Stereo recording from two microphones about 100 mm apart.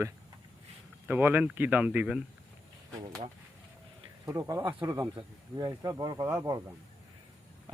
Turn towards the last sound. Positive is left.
turn(degrees=-35)  # may be behind; listen again after turning